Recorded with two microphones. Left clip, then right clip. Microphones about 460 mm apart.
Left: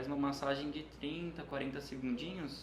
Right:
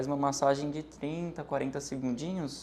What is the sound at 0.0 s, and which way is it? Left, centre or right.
Speech, right.